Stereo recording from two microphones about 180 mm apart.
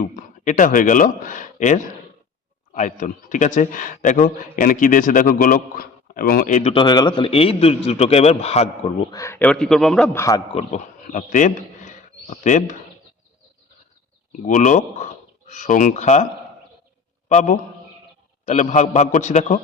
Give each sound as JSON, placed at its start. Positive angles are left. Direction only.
{"t": 0.0, "sound": "a man's voice", "side_deg": 45}
{"t": 6.8, "sound": "a man's voice", "side_deg": 25}
{"t": 9.1, "sound": "a man's voice", "side_deg": 15}
{"t": 10.5, "sound": "a man's voice", "side_deg": 35}
{"t": 14.4, "sound": "a man's voice", "side_deg": 45}
{"t": 17.2, "sound": "a man's voice", "side_deg": 40}